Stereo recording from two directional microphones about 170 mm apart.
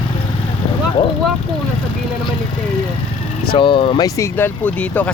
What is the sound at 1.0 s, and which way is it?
Speech, 25° left (ahead or behind).